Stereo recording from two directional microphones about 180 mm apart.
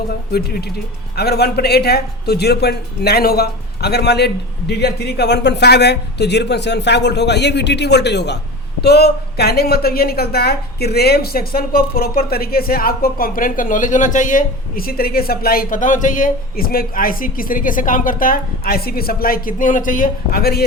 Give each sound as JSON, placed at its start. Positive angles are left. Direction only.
{"t": 0.3, "sound": "a woman's voice", "side_deg": 60}